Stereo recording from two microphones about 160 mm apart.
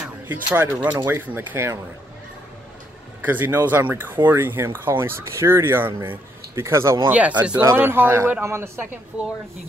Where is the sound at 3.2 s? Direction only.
10° right (ahead or behind).